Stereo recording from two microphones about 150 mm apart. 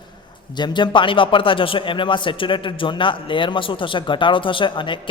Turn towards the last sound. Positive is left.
turn(degrees=35)  # may be behind; listen again after turning